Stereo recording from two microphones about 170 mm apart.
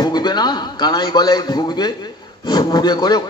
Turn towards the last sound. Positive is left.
turn(degrees=25)  # may be behind; listen again after turning